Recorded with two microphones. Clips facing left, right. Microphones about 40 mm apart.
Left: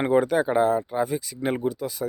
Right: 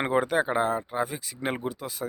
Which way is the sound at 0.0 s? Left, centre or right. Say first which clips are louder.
Left 4 dB; right.